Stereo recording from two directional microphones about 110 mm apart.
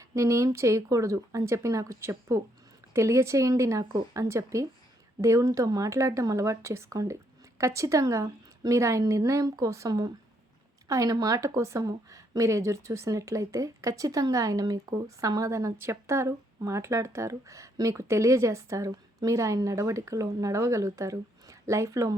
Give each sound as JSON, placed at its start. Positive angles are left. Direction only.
{"t": 0.0, "sound": "speech", "side_deg": -30}